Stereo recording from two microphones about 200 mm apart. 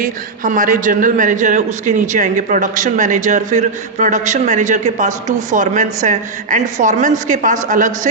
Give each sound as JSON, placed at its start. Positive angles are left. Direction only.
{"t": 0.0, "sound": "a man's voice", "side_deg": -40}